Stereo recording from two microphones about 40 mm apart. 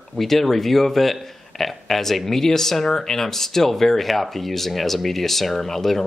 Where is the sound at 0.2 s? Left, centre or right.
Centre.